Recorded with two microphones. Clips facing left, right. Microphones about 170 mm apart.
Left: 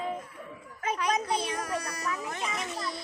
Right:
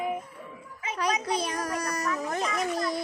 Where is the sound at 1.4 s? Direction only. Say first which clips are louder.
Right 2 dB; 40° right (ahead or behind).